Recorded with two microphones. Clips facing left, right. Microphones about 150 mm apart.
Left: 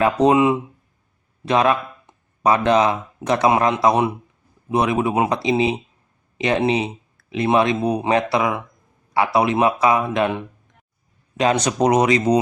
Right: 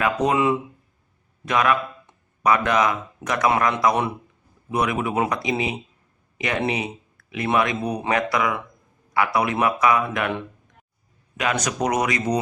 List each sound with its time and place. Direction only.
0.0 s speech: 30° left (ahead or behind)
11.3 s speech: 30° left (ahead or behind)